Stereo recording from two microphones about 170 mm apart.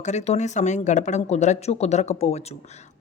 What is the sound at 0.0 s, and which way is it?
Speech, 45° left (ahead or behind).